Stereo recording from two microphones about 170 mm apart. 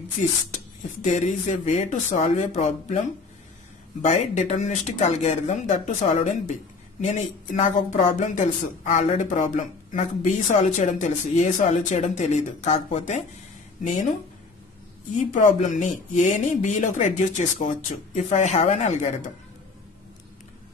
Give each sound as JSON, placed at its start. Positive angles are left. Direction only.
{"t": 1.0, "sound": "speech", "side_deg": 45}
{"t": 4.0, "sound": "speech", "side_deg": 45}
{"t": 15.1, "sound": "speech", "side_deg": 50}